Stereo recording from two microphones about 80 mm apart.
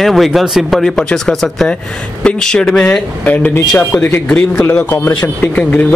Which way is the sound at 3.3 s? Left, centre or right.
Left.